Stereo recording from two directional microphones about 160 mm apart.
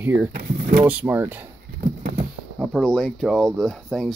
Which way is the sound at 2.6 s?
5° left (ahead or behind).